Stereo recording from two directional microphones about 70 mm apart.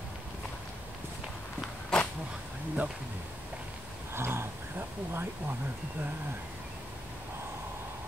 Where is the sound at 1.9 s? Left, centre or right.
Centre.